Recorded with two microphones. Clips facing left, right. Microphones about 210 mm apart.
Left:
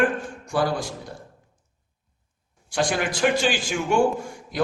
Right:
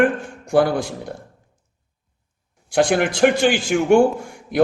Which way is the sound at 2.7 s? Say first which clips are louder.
Right 7 dB; 60° right (ahead or behind).